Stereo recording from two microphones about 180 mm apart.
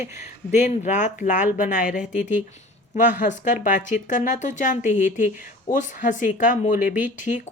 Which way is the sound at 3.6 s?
45° left (ahead or behind).